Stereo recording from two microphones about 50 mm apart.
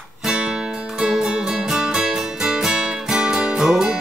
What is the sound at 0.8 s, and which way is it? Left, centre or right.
Music, centre.